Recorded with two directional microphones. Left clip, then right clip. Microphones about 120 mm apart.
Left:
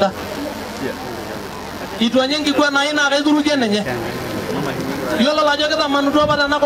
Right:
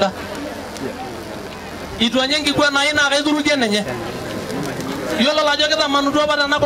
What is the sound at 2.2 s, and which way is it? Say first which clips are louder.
A man's voice: left 1 dB; 15° right (ahead or behind).